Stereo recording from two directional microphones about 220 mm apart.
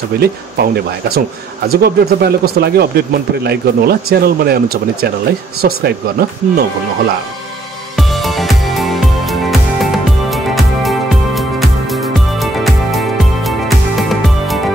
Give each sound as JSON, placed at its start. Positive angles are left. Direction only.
{"t": 0.2, "sound": "speech", "side_deg": -45}
{"t": 7.9, "sound": "music", "side_deg": 0}